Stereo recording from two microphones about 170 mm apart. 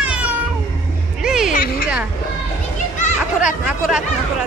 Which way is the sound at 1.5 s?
55° left (ahead or behind).